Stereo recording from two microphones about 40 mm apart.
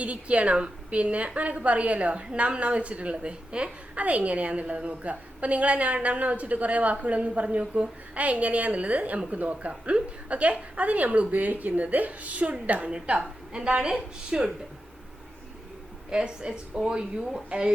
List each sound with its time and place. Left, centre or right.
0.0 s a woman's voice: right; by 14.5 s centre
16.0 s a woman's voice: right